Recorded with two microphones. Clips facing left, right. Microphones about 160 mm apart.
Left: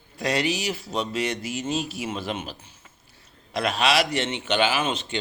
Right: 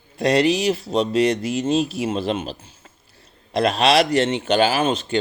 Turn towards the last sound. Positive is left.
turn(degrees=-40)  # may be behind; listen again after turning